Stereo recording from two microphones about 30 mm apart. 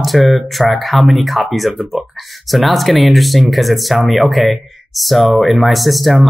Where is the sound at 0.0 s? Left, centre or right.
Centre.